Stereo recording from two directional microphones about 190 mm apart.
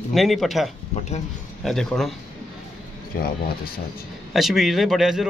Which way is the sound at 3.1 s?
50° left (ahead or behind).